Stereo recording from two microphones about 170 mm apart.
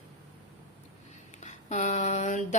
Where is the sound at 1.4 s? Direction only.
45° left (ahead or behind).